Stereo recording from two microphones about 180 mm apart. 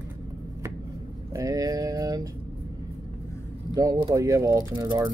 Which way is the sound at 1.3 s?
20° right (ahead or behind).